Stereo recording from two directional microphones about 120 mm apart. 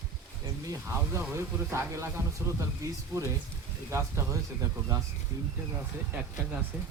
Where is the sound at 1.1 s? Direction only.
20° right (ahead or behind).